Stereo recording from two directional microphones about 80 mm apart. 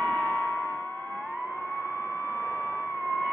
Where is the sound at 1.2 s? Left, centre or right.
Right.